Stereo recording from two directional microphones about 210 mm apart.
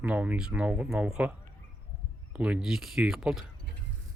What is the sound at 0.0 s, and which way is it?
Speech, 5° right (ahead or behind).